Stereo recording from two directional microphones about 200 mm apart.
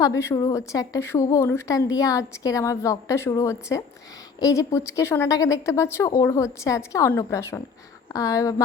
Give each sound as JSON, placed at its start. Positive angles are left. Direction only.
{"t": 0.0, "sound": "a woman's voice", "side_deg": 15}